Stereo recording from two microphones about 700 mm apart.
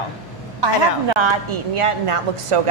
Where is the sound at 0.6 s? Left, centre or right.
Right.